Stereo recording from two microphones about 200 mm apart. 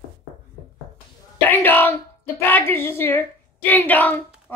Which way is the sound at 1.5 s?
10° left (ahead or behind).